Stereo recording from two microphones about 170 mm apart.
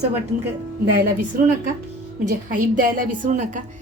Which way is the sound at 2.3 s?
55° right (ahead or behind).